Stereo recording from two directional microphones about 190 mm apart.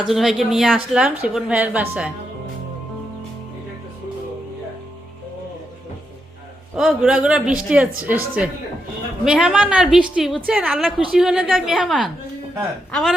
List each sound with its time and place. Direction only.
0.0 s a woman's voice: centre (ahead or behind)
6.7 s a woman's voice: centre (ahead or behind)